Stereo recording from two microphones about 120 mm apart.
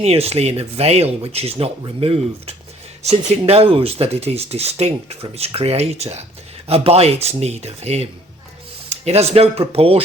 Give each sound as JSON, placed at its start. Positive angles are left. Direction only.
{"t": 0.0, "sound": "speech", "side_deg": -60}